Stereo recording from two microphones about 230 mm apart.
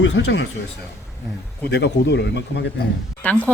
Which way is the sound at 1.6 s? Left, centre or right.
Left.